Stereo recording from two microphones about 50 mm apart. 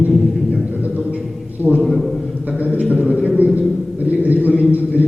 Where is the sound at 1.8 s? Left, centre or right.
Centre.